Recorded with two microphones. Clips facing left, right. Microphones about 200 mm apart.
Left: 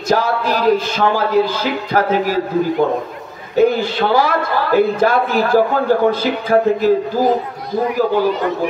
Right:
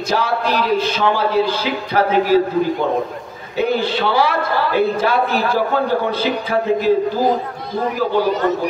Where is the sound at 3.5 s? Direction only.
45° left (ahead or behind).